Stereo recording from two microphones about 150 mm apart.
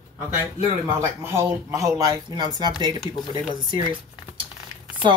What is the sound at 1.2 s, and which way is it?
Speech, 20° right (ahead or behind).